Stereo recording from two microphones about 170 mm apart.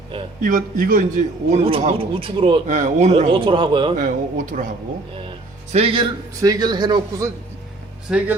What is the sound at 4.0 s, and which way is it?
Speech, 50° right (ahead or behind).